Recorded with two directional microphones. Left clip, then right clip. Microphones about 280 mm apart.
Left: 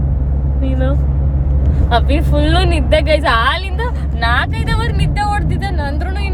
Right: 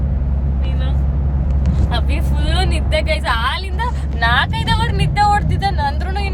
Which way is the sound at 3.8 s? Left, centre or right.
Centre.